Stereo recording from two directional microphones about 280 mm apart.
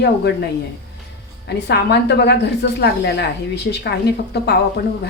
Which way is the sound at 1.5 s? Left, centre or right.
Left.